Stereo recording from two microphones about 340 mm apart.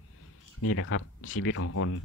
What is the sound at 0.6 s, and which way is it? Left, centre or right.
Speech, left.